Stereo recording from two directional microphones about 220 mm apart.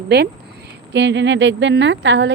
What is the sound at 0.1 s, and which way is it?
A woman's voice, 45° right (ahead or behind).